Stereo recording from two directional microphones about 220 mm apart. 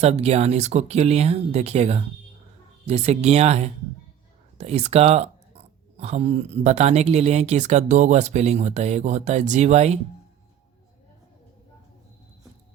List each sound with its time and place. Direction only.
0.0 s speech: 30° right (ahead or behind)